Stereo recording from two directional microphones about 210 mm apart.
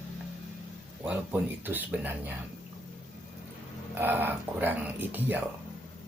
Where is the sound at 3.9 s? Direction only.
10° right (ahead or behind).